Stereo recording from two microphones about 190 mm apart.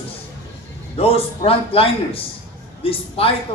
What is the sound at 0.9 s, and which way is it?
Speech, 30° left (ahead or behind).